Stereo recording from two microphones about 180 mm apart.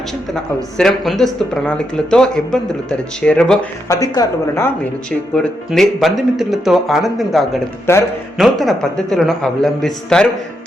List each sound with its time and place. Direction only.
0.8 s speech: centre (ahead or behind)
3.8 s speech: 20° left (ahead or behind)
5.3 s speech: 5° left (ahead or behind)
7.9 s speech: 15° left (ahead or behind)
8.4 s speech: centre (ahead or behind)